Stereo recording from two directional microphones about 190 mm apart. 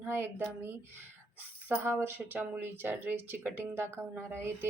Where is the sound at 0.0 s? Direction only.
10° right (ahead or behind).